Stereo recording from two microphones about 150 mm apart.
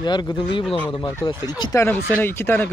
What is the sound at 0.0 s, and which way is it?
Speech, 30° left (ahead or behind).